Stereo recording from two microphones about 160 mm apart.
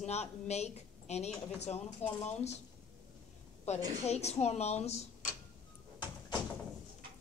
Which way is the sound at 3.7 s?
45° left (ahead or behind).